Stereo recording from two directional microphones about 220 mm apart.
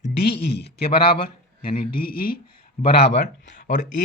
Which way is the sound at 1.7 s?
40° left (ahead or behind).